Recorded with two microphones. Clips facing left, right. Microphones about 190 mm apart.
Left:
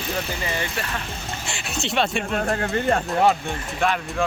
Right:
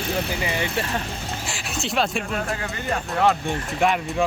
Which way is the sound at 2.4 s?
45° left (ahead or behind).